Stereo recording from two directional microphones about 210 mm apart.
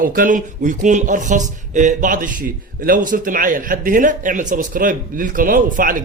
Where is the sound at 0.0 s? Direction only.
40° right (ahead or behind).